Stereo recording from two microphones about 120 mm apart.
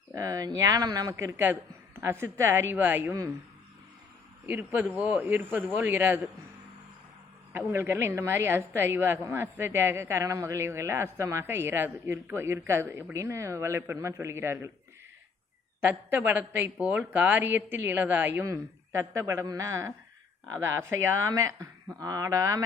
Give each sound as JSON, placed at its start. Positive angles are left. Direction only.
{"t": 0.1, "sound": "a woman's voice", "side_deg": -30}
{"t": 4.4, "sound": "speech", "side_deg": -15}
{"t": 7.7, "sound": "a woman's voice", "side_deg": -20}
{"t": 15.8, "sound": "a woman's voice", "side_deg": -15}